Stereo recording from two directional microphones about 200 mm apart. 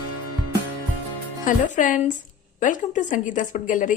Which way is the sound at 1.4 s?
40° left (ahead or behind).